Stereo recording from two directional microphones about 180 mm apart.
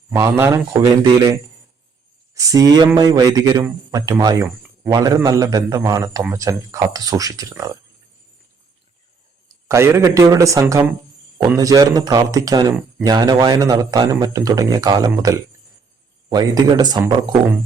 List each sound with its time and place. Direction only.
0.1 s speech: 15° right (ahead or behind)
9.6 s speech: 15° right (ahead or behind)